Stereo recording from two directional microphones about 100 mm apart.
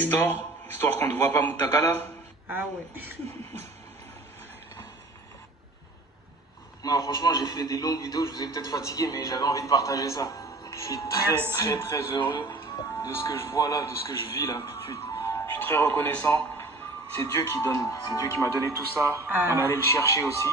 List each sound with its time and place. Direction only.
0.0 s a man's voice: 15° left (ahead or behind)
2.4 s speech: 20° right (ahead or behind)
6.8 s a man's voice: 40° left (ahead or behind)
12.2 s speech: 50° left (ahead or behind)
13.0 s a man's voice: 30° left (ahead or behind)
19.1 s speech: 20° right (ahead or behind)
19.7 s a man's voice: 30° left (ahead or behind)